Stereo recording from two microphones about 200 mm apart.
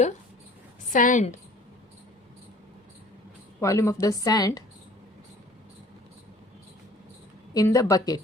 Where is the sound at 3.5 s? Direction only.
15° left (ahead or behind).